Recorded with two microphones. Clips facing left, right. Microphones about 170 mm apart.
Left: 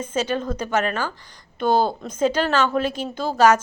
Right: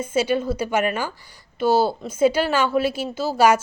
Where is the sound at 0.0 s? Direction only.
10° right (ahead or behind).